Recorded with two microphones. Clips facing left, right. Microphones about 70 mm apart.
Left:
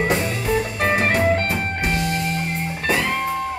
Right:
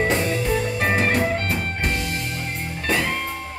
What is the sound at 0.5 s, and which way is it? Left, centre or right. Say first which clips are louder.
Music: left 5 dB; left.